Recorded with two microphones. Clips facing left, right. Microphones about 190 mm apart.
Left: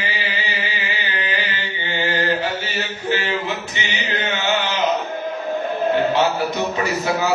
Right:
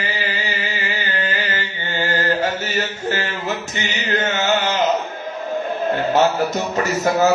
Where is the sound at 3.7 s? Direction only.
45° right (ahead or behind).